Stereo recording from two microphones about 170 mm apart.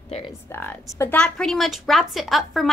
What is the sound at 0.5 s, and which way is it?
A woman's voice, 10° left (ahead or behind).